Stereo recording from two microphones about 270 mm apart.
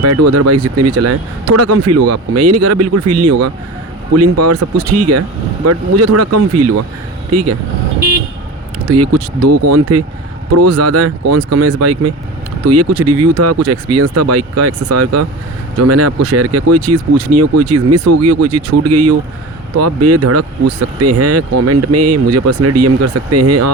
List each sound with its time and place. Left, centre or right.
0.0 s speech: right
8.9 s speech: right